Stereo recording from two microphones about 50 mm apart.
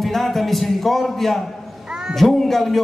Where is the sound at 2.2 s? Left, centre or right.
Centre.